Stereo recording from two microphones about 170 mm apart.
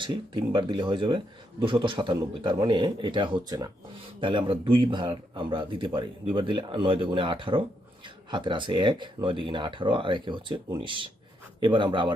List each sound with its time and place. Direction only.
0.0 s a man's voice: 30° right (ahead or behind)